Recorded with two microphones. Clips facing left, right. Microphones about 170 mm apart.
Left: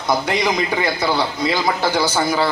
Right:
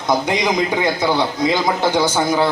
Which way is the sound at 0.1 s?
20° right (ahead or behind).